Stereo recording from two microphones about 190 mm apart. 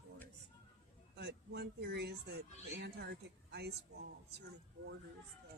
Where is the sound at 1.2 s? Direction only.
60° right (ahead or behind).